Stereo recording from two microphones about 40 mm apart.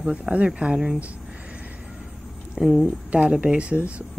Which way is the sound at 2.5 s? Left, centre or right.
Centre.